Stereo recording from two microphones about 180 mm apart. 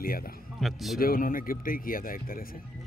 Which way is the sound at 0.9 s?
55° left (ahead or behind).